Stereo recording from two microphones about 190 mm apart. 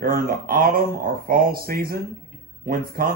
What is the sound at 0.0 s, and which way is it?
A man's voice, 50° right (ahead or behind).